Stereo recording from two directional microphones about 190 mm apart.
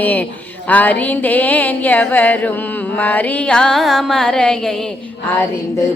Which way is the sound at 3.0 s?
10° left (ahead or behind).